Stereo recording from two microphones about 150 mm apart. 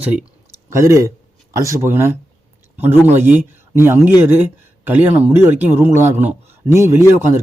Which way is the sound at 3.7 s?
15° right (ahead or behind).